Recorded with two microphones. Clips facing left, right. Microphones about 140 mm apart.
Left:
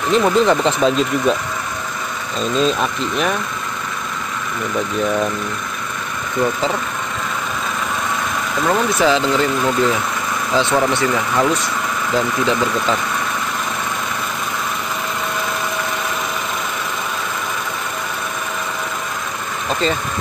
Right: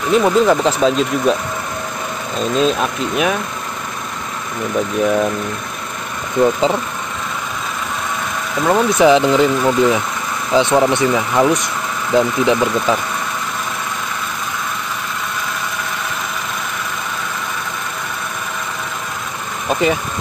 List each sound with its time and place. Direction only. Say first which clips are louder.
0.1 s speech: right 2 dB; 5° right (ahead or behind)
2.5 s speech: right 1 dB; 5° right (ahead or behind)
5.0 s speech: right 4 dB; 10° right (ahead or behind)
6.4 s speech: right 5 dB; 20° right (ahead or behind)
8.6 s speech: right 5 dB; 15° right (ahead or behind)
19.7 s vehicle: right 4 dB; 15° right (ahead or behind)